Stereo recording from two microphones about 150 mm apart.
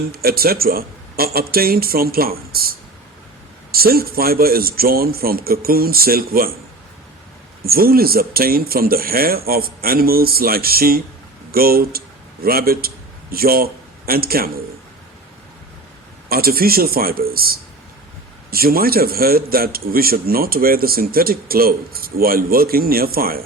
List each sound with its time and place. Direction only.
0.1 s a man's voice: 90° right
7.6 s a man's voice: 85° right
16.3 s a man's voice: 90° right